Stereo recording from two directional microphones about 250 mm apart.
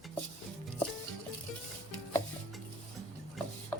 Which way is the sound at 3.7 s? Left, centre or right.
Centre.